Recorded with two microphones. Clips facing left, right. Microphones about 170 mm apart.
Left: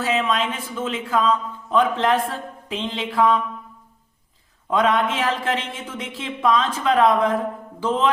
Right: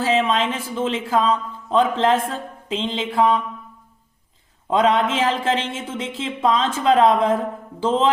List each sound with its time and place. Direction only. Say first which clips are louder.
0.0 s speech: right 3 dB; 25° right (ahead or behind)
4.7 s speech: right 2 dB; 25° right (ahead or behind)